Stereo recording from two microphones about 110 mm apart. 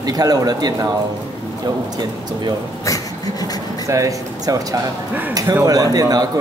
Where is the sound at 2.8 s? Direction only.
30° left (ahead or behind).